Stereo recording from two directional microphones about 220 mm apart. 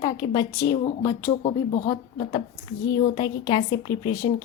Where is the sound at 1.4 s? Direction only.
25° left (ahead or behind).